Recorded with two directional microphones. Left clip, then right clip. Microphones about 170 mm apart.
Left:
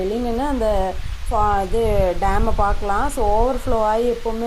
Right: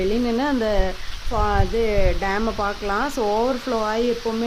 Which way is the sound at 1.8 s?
15° right (ahead or behind).